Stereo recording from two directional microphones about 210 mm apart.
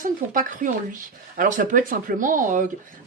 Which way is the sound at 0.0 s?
40° right (ahead or behind).